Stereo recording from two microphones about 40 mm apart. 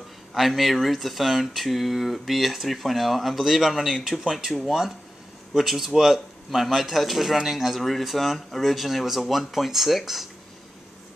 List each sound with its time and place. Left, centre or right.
0.3 s speech: centre